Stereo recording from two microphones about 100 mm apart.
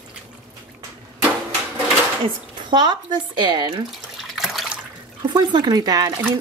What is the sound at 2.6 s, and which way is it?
Speech, 50° right (ahead or behind).